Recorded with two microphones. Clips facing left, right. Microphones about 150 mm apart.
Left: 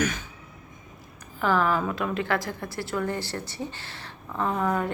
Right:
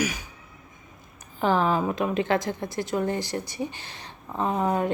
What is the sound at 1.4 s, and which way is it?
A woman's voice, 20° right (ahead or behind).